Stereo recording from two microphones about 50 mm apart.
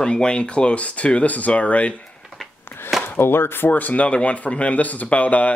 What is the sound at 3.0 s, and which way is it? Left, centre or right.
Speech, left.